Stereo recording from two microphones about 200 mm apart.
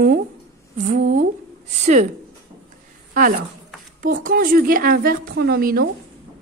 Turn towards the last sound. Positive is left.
turn(degrees=-45)  # may be behind; listen again after turning